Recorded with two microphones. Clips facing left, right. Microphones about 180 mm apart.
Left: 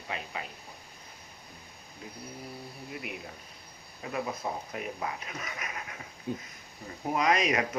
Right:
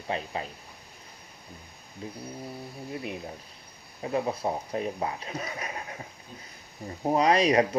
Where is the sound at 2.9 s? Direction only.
30° right (ahead or behind).